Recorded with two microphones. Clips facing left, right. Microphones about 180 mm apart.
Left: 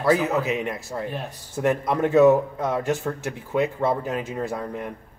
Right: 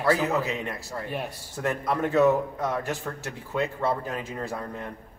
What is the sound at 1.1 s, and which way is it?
Speech, 10° right (ahead or behind).